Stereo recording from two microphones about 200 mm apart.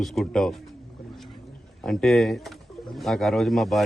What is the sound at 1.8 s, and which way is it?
A man's voice, centre (ahead or behind).